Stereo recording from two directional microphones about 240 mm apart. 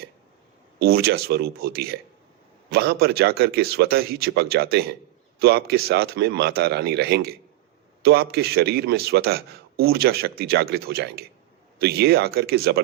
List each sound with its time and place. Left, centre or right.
0.8 s a man's voice: right